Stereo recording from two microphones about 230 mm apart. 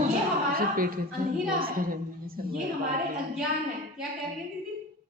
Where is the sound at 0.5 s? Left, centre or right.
Right.